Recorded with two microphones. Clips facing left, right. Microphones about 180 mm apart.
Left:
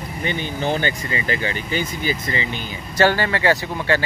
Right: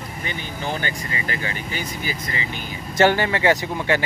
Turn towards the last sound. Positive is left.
turn(degrees=-15)  # may be behind; listen again after turning